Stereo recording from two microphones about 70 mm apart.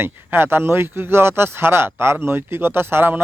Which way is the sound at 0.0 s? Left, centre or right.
Right.